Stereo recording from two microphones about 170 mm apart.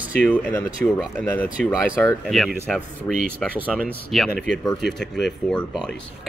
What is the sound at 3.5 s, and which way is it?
Speech, 10° right (ahead or behind).